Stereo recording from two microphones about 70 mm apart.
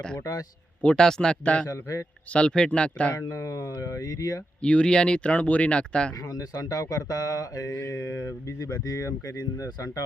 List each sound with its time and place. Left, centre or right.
0.2 s speech: left
0.8 s speech: centre
1.6 s speech: left
2.3 s speech: centre
3.2 s speech: left
4.6 s speech: centre
6.1 s speech: left